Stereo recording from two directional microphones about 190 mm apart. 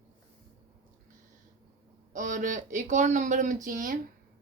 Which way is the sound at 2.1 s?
45° right (ahead or behind).